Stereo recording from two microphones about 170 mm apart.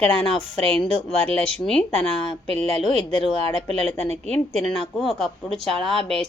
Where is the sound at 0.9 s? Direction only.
35° right (ahead or behind).